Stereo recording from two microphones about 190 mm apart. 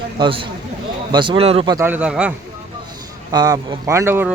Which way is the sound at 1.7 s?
10° right (ahead or behind).